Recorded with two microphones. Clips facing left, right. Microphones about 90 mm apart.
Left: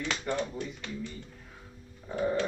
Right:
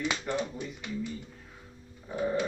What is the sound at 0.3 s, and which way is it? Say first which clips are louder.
Speech: left 2 dB; centre (ahead or behind).